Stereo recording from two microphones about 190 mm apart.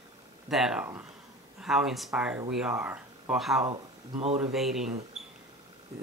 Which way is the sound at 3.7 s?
35° right (ahead or behind).